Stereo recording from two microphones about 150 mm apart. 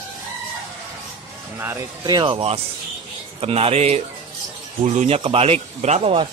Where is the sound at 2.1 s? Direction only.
35° right (ahead or behind).